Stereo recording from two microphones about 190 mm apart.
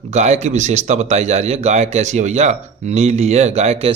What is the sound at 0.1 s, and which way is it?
Speech, 35° right (ahead or behind).